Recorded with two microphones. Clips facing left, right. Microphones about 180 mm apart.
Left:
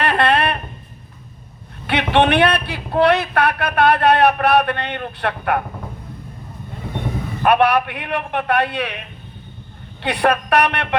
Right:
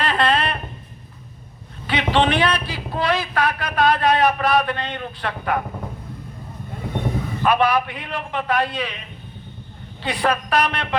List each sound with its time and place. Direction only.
0.0 s a sound: 65° left (ahead or behind)
1.9 s speech: 60° left (ahead or behind)
7.4 s speech: 65° left (ahead or behind)